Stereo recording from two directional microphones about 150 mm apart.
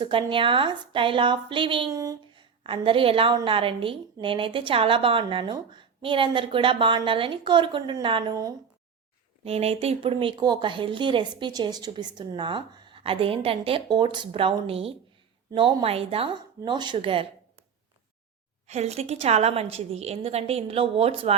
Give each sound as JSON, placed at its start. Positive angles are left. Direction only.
{"t": 0.0, "sound": "a woman's voice", "side_deg": -35}
{"t": 1.9, "sound": "a sound", "side_deg": -20}
{"t": 2.4, "sound": "a woman's voice", "side_deg": -35}
{"t": 9.4, "sound": "a woman's voice", "side_deg": -40}
{"t": 18.7, "sound": "a woman's voice", "side_deg": -45}